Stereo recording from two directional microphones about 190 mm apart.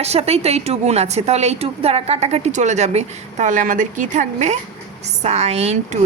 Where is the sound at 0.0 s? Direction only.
35° right (ahead or behind).